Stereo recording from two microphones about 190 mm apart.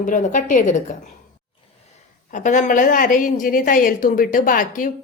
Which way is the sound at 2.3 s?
40° left (ahead or behind).